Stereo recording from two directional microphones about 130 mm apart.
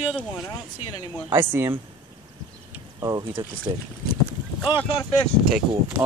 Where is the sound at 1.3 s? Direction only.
15° right (ahead or behind).